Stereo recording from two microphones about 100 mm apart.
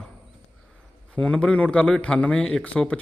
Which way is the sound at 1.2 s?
10° left (ahead or behind).